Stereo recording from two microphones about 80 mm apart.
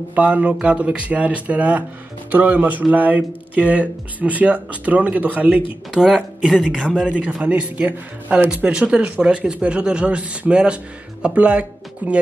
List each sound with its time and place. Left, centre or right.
0.1 s a man's voice: centre
7.4 s speech: centre